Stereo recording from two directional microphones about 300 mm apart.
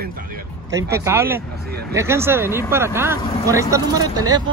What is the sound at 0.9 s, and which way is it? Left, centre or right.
Speech, centre.